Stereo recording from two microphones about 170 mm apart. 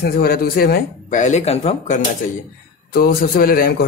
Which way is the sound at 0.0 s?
65° left (ahead or behind).